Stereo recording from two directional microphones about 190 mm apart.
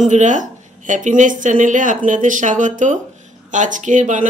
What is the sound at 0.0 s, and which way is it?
A woman's voice, 40° right (ahead or behind).